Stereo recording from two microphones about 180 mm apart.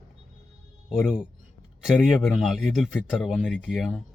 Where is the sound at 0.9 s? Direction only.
5° right (ahead or behind).